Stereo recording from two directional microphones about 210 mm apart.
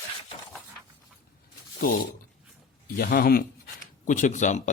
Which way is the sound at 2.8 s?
45° left (ahead or behind).